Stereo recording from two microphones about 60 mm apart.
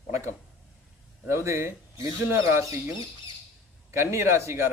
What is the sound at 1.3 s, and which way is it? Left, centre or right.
A man's voice, right.